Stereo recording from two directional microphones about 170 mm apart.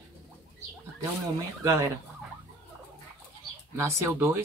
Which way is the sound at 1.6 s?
20° right (ahead or behind).